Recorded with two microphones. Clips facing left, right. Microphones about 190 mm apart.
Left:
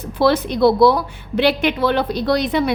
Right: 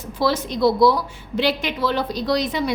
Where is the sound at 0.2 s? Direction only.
60° left (ahead or behind).